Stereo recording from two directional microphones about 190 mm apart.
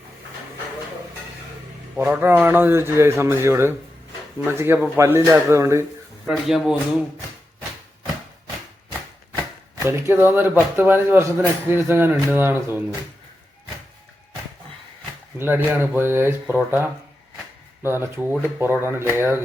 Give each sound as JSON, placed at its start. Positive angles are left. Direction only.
{"t": 2.0, "sound": "speech", "side_deg": -10}
{"t": 6.2, "sound": "speech", "side_deg": -5}
{"t": 9.8, "sound": "speech", "side_deg": -15}
{"t": 15.4, "sound": "speech", "side_deg": -10}